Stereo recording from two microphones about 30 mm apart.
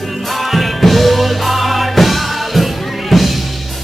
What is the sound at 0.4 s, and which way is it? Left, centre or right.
Music, centre.